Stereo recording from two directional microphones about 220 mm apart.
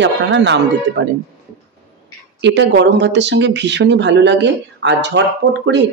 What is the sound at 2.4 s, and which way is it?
A woman's voice, 55° right (ahead or behind).